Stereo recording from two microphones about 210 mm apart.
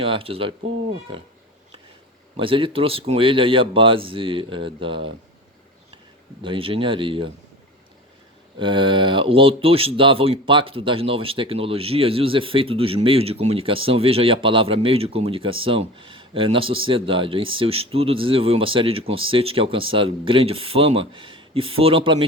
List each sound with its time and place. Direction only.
0.0 s speech: 25° right (ahead or behind)
2.3 s speech: 25° right (ahead or behind)
6.4 s speech: 25° right (ahead or behind)
8.5 s speech: 25° right (ahead or behind)